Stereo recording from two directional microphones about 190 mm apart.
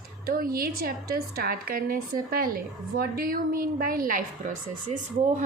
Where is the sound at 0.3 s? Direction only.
50° right (ahead or behind).